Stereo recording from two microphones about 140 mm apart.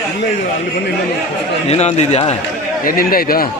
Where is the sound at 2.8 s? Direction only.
90° left.